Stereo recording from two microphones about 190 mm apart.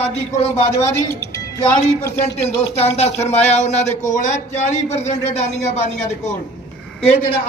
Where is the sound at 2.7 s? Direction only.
35° left (ahead or behind).